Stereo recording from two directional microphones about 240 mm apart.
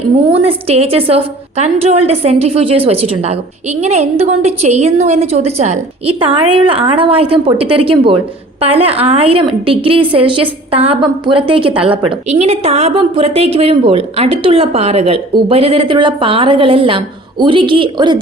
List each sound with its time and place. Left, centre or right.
0.4 s a woman's voice: right